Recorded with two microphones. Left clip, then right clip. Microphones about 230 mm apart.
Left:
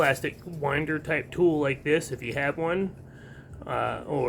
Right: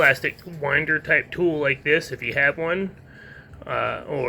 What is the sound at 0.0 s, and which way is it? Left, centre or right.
A man's voice, centre.